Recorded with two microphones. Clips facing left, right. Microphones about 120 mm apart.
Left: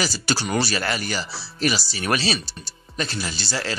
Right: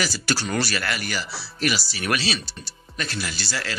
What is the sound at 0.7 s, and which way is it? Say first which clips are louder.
Speech: left 2 dB; 30° left (ahead or behind).